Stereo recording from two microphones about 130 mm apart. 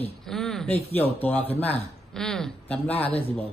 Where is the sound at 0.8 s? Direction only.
15° left (ahead or behind).